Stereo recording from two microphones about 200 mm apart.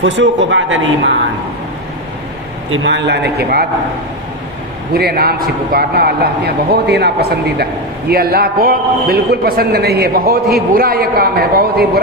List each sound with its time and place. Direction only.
0.0 s speech: 70° right (ahead or behind)
2.6 s a man's voice: 80° right; by 3.7 s 55° right (ahead or behind)
4.9 s a man's voice: 50° right (ahead or behind)